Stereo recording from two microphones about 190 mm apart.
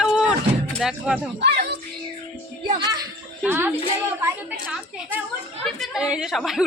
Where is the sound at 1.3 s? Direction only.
60° right (ahead or behind).